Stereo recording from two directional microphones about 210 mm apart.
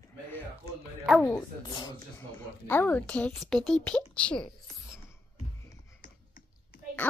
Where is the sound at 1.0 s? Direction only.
Centre (ahead or behind).